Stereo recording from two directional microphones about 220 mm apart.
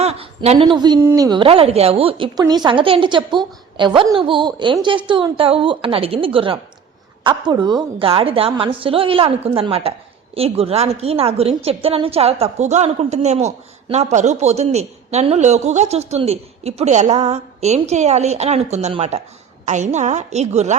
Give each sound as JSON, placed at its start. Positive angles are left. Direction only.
{"t": 0.0, "sound": "a woman's voice", "side_deg": -30}